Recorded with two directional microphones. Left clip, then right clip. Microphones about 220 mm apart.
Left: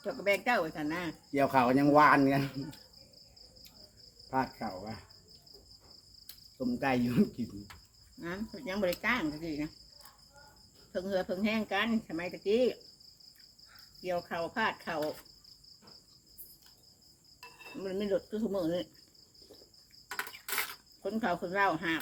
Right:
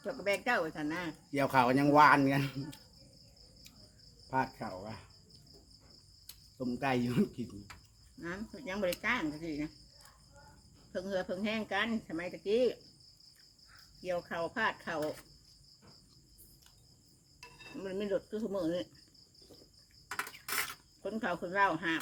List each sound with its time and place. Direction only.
0.0 s speech: 10° left (ahead or behind)
1.3 s cricket: 25° right (ahead or behind)
4.3 s cricket: 20° right (ahead or behind)
6.2 s cricket: 15° right (ahead or behind)
8.2 s speech: 10° left (ahead or behind)
10.9 s speech: 10° left (ahead or behind)
14.0 s speech: 10° left (ahead or behind)
17.7 s speech: 10° left (ahead or behind)
20.2 s a sound: centre (ahead or behind)
21.0 s speech: 10° left (ahead or behind)